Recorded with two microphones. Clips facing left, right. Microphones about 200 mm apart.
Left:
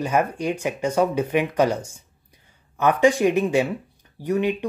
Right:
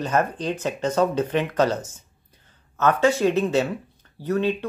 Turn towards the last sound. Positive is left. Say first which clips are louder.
# left 1 dB
turn(degrees=15)  # may be behind; listen again after turning